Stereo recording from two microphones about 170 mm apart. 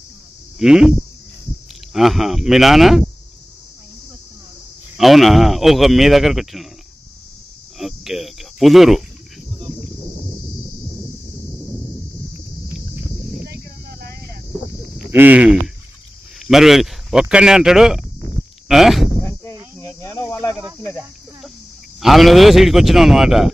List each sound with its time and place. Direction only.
0.6 s speech: 5° right (ahead or behind)
2.0 s speech: centre (ahead or behind)
4.9 s speech: centre (ahead or behind)
7.8 s speech: centre (ahead or behind)
13.4 s a sound: 65° right (ahead or behind)
15.0 s speech: 10° right (ahead or behind)
19.8 s cricket: 20° left (ahead or behind)
22.0 s speech: centre (ahead or behind)